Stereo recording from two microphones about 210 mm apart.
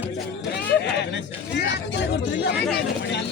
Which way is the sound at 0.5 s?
55° left (ahead or behind).